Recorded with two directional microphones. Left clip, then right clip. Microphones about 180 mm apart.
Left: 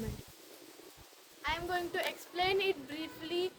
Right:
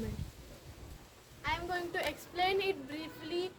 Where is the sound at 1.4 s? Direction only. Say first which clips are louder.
Left 1 dB; 15° left (ahead or behind).